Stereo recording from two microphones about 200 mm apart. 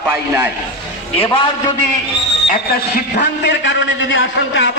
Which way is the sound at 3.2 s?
65° left (ahead or behind).